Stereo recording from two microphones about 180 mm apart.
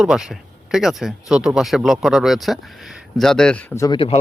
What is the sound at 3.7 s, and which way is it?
Speech, 20° left (ahead or behind).